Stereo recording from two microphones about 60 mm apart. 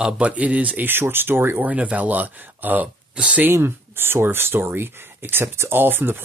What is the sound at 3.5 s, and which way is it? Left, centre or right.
Speech, right.